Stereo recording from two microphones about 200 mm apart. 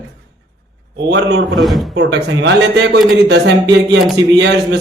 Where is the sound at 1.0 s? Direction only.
60° right (ahead or behind).